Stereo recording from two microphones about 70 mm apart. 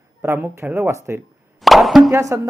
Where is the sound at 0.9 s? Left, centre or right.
Right.